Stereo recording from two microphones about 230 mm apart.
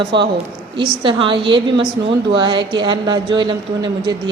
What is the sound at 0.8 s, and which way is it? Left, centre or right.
A woman's voice, right.